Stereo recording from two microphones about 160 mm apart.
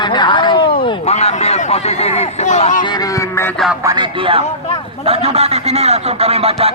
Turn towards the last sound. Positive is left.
turn(degrees=-40)  # may be behind; listen again after turning